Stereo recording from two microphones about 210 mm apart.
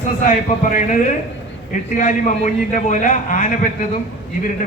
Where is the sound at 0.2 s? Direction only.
40° left (ahead or behind).